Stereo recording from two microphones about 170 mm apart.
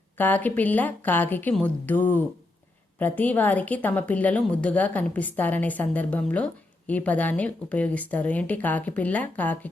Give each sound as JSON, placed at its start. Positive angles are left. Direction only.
{"t": 0.2, "sound": "a woman's voice", "side_deg": 10}